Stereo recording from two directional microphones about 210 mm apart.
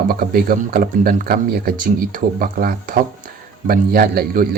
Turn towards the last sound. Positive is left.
turn(degrees=-45)  # may be behind; listen again after turning